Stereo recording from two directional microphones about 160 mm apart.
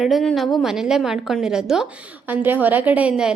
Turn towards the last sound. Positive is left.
turn(degrees=-5)  # may be behind; listen again after turning